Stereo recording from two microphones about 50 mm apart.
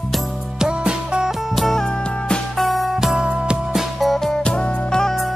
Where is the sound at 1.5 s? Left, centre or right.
Centre.